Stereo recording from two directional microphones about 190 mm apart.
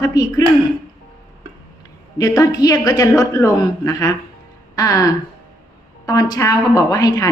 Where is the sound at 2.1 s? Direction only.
20° left (ahead or behind).